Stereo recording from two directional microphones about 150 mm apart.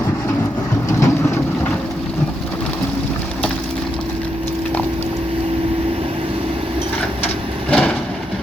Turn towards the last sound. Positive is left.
turn(degrees=10)  # may be behind; listen again after turning